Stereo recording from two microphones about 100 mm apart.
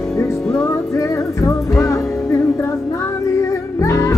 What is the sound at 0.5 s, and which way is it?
Music, 30° left (ahead or behind).